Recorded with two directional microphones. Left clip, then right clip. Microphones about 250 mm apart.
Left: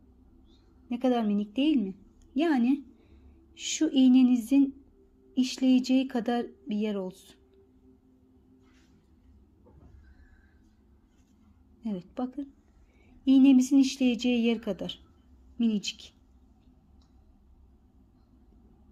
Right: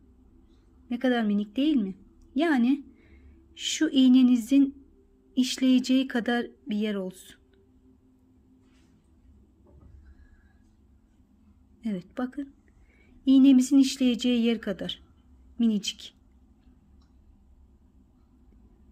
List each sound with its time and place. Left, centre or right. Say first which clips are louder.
0.9 s a woman's voice: right 1 dB; centre
11.8 s a woman's voice: right 2 dB; centre